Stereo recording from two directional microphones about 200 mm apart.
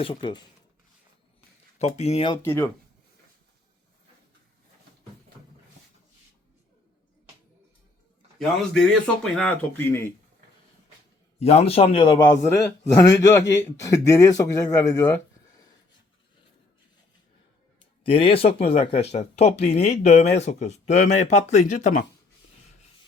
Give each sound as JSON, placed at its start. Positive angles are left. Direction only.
{"t": 0.0, "sound": "a man's voice", "side_deg": 25}
{"t": 1.8, "sound": "speech", "side_deg": 35}
{"t": 2.4, "sound": "a man's voice", "side_deg": 10}
{"t": 8.9, "sound": "a man's voice", "side_deg": 5}
{"t": 11.3, "sound": "a man's voice", "side_deg": 30}
{"t": 12.5, "sound": "a man's voice", "side_deg": 55}
{"t": 12.9, "sound": "a man's voice", "side_deg": 15}
{"t": 18.0, "sound": "a man's voice", "side_deg": 30}